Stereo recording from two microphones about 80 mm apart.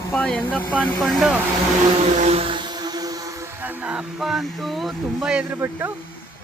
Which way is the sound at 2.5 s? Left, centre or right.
Right.